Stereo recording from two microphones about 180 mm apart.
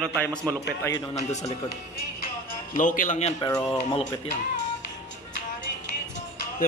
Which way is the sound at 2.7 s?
45° left (ahead or behind).